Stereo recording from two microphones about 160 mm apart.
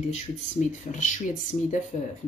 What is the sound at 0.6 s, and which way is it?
Speech, 55° left (ahead or behind).